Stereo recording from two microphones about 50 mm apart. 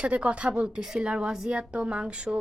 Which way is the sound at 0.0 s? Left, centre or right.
Right.